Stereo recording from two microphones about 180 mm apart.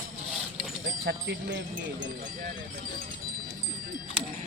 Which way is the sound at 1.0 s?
75° right (ahead or behind).